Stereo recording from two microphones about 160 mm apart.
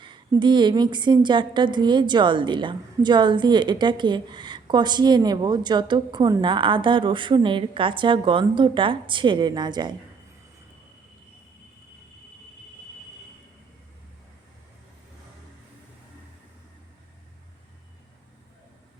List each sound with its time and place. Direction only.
0.0 s a woman's voice: 30° right (ahead or behind)